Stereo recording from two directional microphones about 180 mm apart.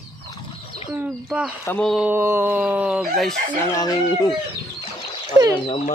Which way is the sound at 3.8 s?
20° left (ahead or behind).